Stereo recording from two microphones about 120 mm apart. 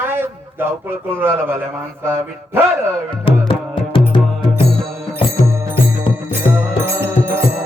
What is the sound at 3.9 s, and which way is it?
Music, 40° left (ahead or behind).